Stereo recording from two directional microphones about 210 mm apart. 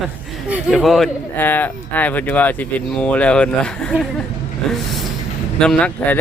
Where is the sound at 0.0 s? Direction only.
5° right (ahead or behind).